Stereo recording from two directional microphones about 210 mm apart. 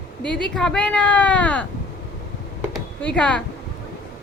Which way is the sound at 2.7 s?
5° left (ahead or behind).